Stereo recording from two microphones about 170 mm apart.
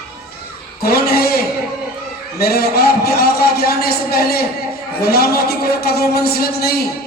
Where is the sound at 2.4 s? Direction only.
65° left (ahead or behind).